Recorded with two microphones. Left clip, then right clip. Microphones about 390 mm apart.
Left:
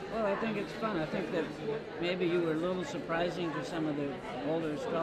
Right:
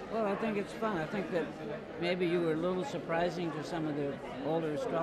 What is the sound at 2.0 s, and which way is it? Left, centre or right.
Speech, centre.